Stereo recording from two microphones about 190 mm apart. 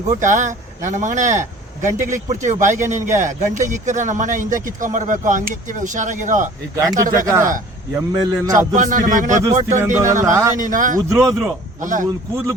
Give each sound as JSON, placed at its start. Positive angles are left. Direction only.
{"t": 0.2, "sound": "speech", "side_deg": -40}
{"t": 7.1, "sound": "speech", "side_deg": -15}
{"t": 8.5, "sound": "a man's voice", "side_deg": -45}
{"t": 9.4, "sound": "speech", "side_deg": -20}
{"t": 10.5, "sound": "a man's voice", "side_deg": -45}
{"t": 11.1, "sound": "speech", "side_deg": -15}
{"t": 11.8, "sound": "a man's voice", "side_deg": -40}